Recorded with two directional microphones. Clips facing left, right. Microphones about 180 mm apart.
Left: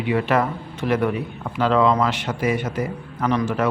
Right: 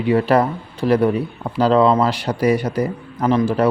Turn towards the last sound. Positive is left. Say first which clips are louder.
# right 5 dB
turn(degrees=-30)  # may be behind; listen again after turning